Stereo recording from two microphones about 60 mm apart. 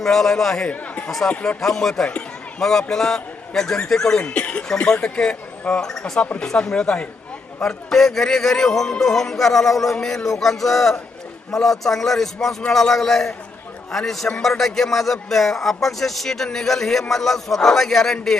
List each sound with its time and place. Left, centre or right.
0.0 s a man's voice: centre
0.7 s speech: left
1.6 s a man's voice: centre